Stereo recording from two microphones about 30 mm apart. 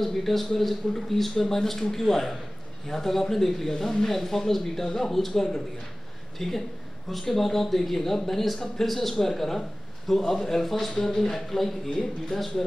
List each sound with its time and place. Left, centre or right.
0.0 s a man's voice: centre